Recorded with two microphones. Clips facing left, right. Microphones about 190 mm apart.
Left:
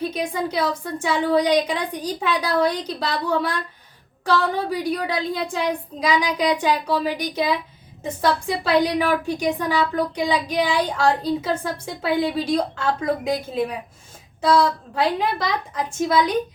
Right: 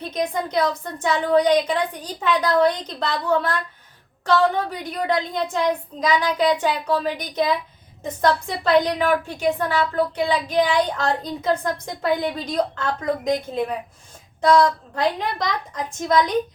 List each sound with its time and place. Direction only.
0.1 s a woman's voice: 10° left (ahead or behind)
14.4 s a woman's voice: 5° left (ahead or behind)